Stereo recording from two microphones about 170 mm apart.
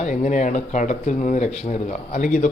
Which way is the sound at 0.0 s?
45° left (ahead or behind).